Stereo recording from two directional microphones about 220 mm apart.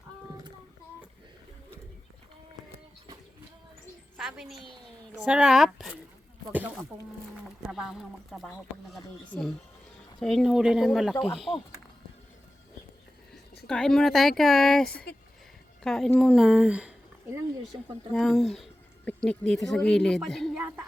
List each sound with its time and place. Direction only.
4.2 s a woman's voice: centre (ahead or behind)
11.5 s speech: 15° left (ahead or behind)
13.7 s speech: centre (ahead or behind)